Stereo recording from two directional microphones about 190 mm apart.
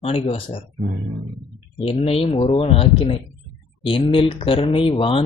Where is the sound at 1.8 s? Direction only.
30° left (ahead or behind).